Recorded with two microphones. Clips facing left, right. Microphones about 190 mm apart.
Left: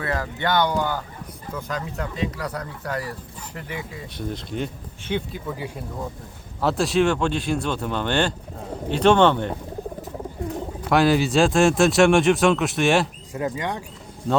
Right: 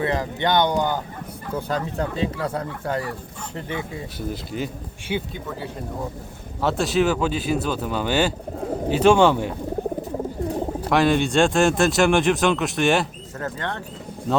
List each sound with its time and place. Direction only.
0.0 s speech: 20° right (ahead or behind)
1.5 s speech: 30° right (ahead or behind)
4.2 s a man's voice: 5° right (ahead or behind)
5.5 s speech: 10° left (ahead or behind)
6.6 s a man's voice: centre (ahead or behind)
10.8 s a man's voice: centre (ahead or behind)
13.3 s speech: 15° left (ahead or behind)